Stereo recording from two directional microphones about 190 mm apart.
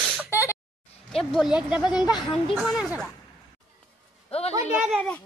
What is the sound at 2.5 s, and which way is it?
Speech, 5° right (ahead or behind).